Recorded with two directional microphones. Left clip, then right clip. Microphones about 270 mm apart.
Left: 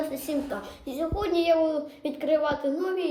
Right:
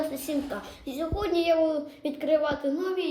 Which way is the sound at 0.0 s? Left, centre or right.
Centre.